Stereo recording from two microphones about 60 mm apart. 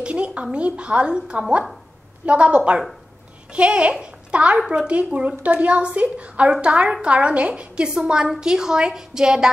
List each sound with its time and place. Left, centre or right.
0.0 s a woman's voice: centre